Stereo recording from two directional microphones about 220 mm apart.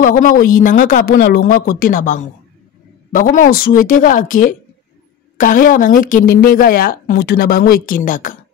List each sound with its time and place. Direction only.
0.0 s a woman's voice: 40° left (ahead or behind)